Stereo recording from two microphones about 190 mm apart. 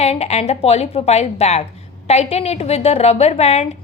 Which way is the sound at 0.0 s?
35° left (ahead or behind).